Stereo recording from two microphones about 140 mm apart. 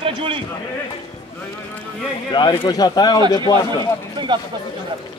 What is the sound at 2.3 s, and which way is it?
Speech, 30° left (ahead or behind).